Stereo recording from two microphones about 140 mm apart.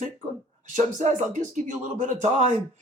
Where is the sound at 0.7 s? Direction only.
60° right (ahead or behind).